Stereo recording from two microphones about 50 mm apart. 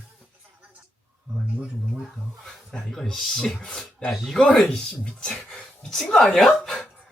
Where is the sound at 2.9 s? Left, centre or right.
Centre.